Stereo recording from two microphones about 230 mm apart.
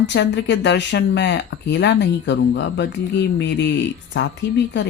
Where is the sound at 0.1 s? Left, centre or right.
Left.